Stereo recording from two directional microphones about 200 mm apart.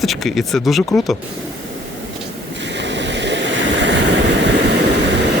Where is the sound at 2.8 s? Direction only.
65° right (ahead or behind).